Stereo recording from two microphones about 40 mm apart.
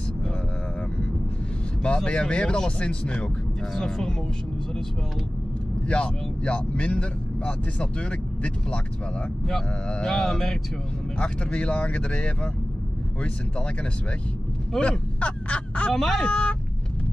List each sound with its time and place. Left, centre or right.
2.0 s speech: left
3.7 s mantra: centre
5.9 s speech: left
9.8 s mantra: left
11.1 s speech: left
14.8 s speech: left
15.9 s mantra: centre
16.3 s speech: left